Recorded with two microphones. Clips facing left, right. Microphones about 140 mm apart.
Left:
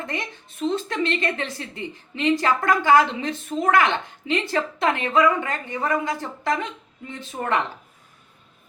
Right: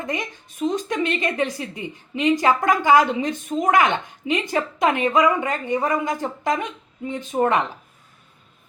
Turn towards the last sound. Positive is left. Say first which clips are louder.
# right 5 dB
turn(degrees=-20)  # may be behind; listen again after turning